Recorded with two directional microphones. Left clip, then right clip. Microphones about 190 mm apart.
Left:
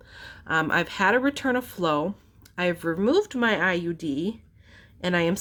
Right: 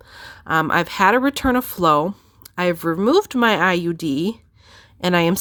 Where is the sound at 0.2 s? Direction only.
35° right (ahead or behind).